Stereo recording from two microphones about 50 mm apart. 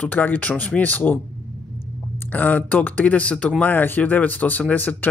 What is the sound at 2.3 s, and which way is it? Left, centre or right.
Speech, left.